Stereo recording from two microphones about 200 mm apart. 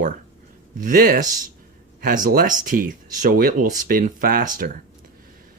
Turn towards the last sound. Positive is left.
turn(degrees=-45)  # may be behind; listen again after turning